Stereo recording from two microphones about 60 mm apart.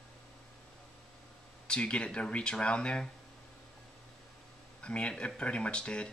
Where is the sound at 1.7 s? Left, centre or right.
Centre.